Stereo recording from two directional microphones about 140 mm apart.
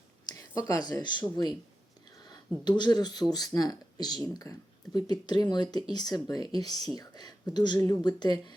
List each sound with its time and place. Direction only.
0.3 s speech: 25° left (ahead or behind)
2.6 s speech: 30° left (ahead or behind)